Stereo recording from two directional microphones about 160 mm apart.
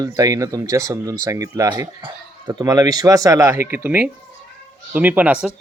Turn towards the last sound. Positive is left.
turn(degrees=-10)  # may be behind; listen again after turning